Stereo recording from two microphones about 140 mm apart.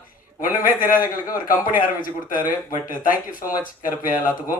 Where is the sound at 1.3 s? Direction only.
80° left.